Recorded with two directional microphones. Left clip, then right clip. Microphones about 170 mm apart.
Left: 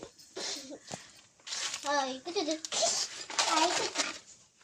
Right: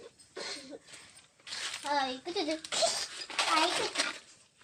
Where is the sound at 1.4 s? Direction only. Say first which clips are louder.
Left 2 dB; 30° left (ahead or behind).